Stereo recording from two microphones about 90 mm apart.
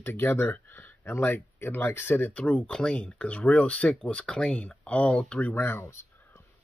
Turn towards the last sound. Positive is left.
turn(degrees=25)  # may be behind; listen again after turning